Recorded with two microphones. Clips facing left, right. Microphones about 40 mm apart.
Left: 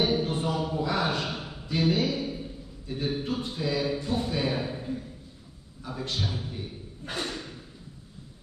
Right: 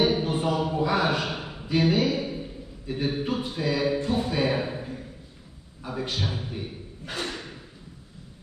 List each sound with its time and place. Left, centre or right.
0.0 s a man's voice: right